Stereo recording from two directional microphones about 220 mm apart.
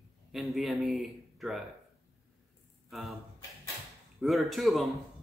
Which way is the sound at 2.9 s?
Centre (ahead or behind).